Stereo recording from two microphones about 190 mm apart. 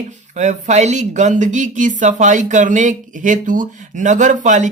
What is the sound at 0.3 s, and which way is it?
Speech, 40° right (ahead or behind).